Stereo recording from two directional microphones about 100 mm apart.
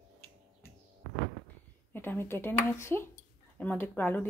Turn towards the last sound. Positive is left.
turn(degrees=20)  # may be behind; listen again after turning